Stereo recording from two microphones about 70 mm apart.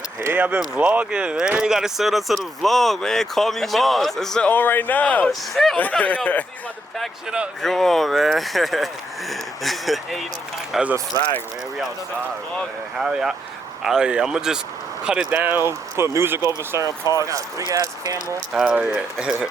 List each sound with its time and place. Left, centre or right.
0.3 s speech: right; by 4.4 s centre
4.4 s speech: left
5.3 s speech: centre
5.7 s speech: left
7.6 s speech: centre
13.0 s speech: centre
15.3 s speech: right
16.8 s speech: left
17.7 s speech: right
18.5 s speech: centre